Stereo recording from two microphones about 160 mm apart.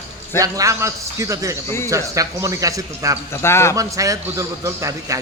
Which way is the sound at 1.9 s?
20° right (ahead or behind).